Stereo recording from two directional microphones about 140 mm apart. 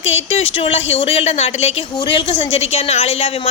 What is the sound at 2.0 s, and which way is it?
A woman's voice, 35° left (ahead or behind).